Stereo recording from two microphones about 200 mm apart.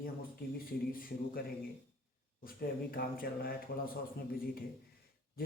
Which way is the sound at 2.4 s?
45° left (ahead or behind).